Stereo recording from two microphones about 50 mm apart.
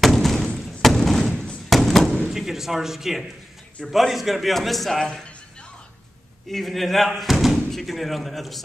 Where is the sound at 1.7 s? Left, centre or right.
Centre.